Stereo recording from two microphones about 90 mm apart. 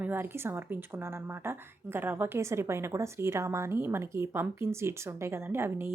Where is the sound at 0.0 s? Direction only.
25° right (ahead or behind).